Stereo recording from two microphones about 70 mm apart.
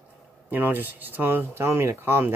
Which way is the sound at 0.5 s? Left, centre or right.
Right.